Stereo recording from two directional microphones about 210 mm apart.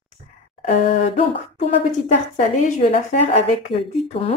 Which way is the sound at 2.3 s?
35° left (ahead or behind).